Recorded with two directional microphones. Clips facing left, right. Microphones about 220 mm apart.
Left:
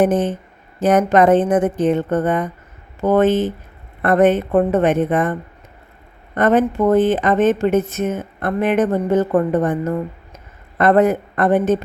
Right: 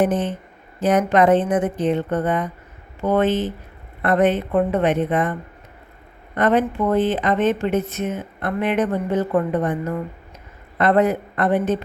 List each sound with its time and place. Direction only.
0.0 s speech: 45° left (ahead or behind)
6.3 s speech: 50° left (ahead or behind)